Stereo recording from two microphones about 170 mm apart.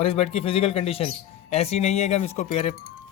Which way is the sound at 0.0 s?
35° left (ahead or behind).